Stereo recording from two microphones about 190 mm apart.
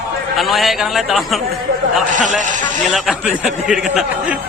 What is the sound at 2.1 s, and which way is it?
Speech, 40° right (ahead or behind).